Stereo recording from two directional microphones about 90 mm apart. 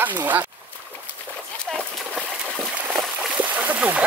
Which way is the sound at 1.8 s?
15° right (ahead or behind).